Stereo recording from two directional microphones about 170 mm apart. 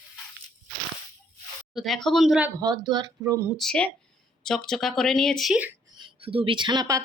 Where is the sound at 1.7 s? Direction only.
Centre (ahead or behind).